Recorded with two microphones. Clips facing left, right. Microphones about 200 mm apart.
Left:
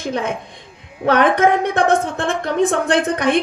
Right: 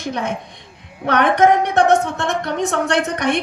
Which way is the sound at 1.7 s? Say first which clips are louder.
Right 2 dB; 55° left (ahead or behind).